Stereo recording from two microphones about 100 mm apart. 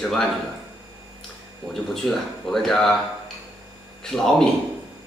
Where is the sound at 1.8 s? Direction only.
5° left (ahead or behind).